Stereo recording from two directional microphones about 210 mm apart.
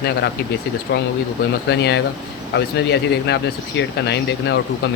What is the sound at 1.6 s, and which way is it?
Speech, 55° left (ahead or behind).